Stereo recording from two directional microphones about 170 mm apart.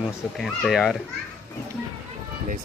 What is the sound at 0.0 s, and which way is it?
Speech, centre (ahead or behind).